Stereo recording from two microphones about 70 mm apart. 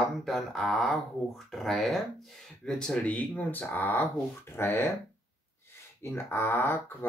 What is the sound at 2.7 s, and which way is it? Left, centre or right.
Speech, centre.